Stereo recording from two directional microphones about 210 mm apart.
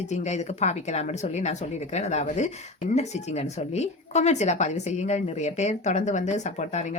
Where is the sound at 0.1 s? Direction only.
35° left (ahead or behind).